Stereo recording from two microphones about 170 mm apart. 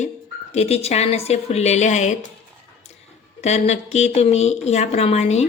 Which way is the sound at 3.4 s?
40° left (ahead or behind).